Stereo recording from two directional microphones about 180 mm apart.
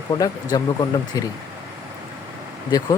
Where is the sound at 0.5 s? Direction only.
20° left (ahead or behind).